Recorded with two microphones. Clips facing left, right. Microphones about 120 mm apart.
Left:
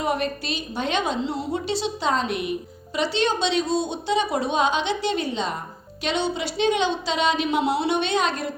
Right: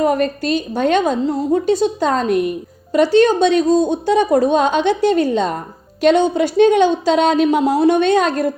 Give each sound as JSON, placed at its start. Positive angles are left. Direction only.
{"t": 0.0, "sound": "speech", "side_deg": -45}